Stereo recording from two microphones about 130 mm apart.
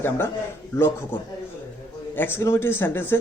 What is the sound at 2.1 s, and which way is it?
Speech, 15° left (ahead or behind).